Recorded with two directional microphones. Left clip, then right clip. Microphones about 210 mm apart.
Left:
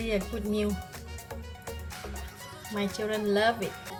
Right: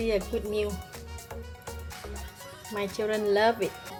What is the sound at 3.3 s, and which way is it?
Speech, 35° right (ahead or behind).